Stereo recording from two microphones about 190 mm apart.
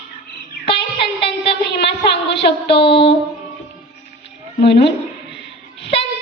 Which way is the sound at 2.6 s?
30° left (ahead or behind).